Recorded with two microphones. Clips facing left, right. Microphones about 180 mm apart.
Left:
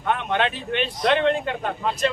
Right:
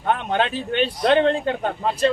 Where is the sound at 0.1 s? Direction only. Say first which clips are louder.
Right 2 dB; 35° right (ahead or behind).